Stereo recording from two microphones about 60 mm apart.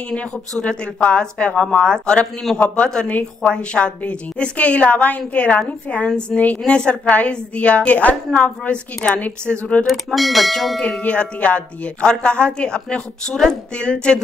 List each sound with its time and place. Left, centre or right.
0.1 s a woman's voice: centre
9.8 s speech: centre
10.8 s speech: left